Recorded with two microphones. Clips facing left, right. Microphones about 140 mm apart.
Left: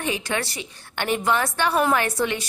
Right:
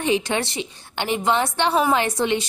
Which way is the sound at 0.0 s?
25° right (ahead or behind).